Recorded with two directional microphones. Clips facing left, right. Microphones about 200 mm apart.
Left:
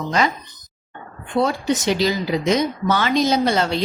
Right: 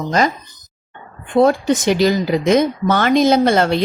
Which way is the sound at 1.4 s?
50° right (ahead or behind).